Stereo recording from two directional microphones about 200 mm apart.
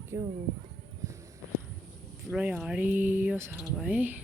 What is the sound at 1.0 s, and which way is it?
Walk, 15° right (ahead or behind).